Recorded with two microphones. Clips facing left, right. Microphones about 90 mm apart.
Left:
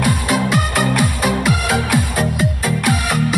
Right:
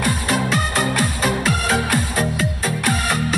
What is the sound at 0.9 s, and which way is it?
Music, 5° left (ahead or behind).